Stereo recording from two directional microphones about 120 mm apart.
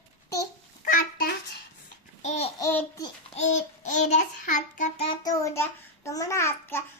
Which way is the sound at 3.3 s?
85° left.